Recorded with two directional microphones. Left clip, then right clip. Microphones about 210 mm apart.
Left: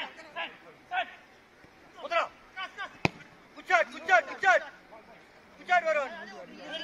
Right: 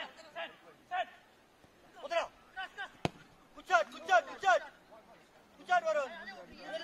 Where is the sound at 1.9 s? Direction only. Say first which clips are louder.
Left 6 dB; 45° right (ahead or behind).